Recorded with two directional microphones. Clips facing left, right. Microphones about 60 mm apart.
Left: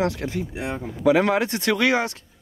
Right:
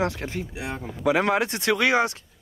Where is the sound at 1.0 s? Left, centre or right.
Centre.